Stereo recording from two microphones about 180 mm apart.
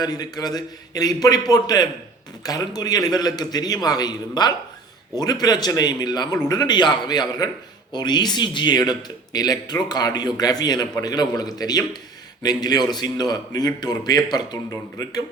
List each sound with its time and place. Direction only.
0.0 s a man's voice: 20° left (ahead or behind)